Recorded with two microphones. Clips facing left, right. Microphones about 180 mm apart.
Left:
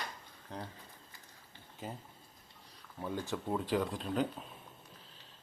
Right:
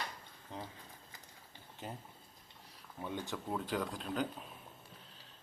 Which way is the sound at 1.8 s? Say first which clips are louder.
Left 2 dB; centre (ahead or behind).